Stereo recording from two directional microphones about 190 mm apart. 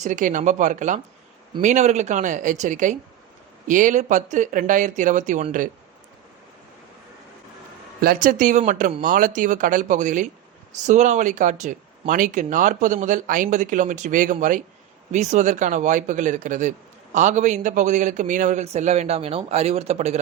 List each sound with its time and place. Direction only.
0.0 s speech: 40° right (ahead or behind)
8.0 s speech: 45° right (ahead or behind)